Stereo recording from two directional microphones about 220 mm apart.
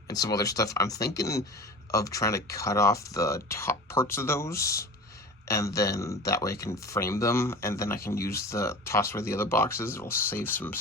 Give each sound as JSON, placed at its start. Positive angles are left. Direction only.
{"t": 0.1, "sound": "speech", "side_deg": 15}